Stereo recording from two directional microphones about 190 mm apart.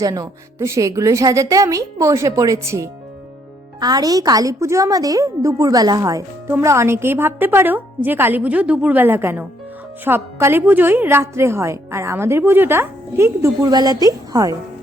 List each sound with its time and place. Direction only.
0.0 s a woman's voice: 20° right (ahead or behind)